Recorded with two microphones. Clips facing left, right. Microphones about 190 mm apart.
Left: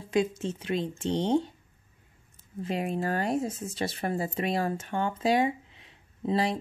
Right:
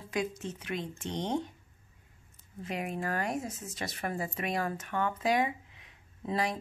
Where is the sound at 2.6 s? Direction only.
30° left (ahead or behind).